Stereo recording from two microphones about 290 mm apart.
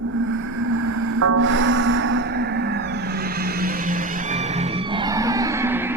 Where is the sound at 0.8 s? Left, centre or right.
Right.